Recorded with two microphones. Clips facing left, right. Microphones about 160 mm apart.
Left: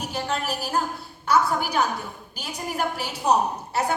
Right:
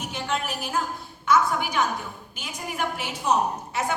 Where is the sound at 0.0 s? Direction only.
35° left (ahead or behind).